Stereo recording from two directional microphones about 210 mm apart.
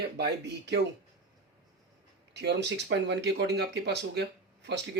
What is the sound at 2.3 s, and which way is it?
Speech, 55° right (ahead or behind).